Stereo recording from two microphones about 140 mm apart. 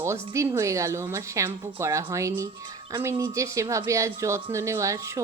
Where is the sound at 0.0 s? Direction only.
20° right (ahead or behind).